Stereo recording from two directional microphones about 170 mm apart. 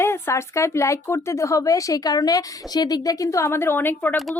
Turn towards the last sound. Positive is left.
turn(degrees=10)  # may be behind; listen again after turning